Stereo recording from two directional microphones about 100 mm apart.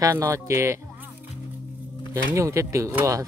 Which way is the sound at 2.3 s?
30° right (ahead or behind).